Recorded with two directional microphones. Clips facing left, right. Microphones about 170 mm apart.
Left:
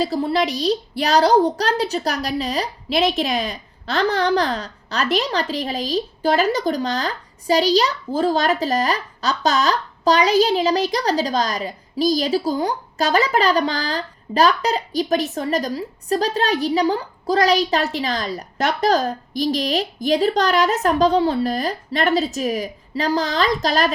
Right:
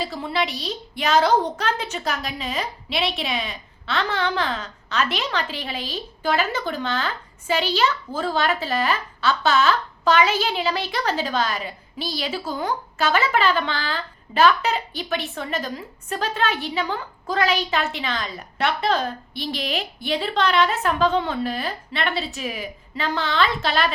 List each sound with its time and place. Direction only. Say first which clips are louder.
0.0 s a woman's voice: left 6 dB; 35° left (ahead or behind)